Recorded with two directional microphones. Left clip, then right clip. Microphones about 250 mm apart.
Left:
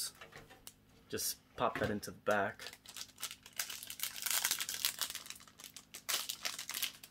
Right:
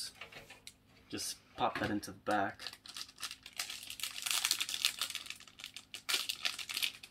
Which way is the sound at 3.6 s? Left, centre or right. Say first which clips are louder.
Right 1 dB; left.